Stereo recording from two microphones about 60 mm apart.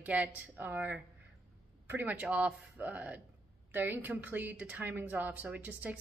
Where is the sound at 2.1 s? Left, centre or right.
Right.